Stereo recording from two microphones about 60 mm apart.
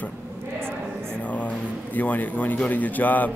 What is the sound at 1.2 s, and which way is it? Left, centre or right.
A man's voice, left.